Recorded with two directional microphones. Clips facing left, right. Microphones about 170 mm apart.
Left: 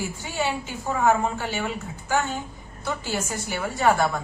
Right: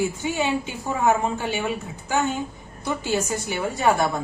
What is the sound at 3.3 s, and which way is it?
Speech, 20° right (ahead or behind).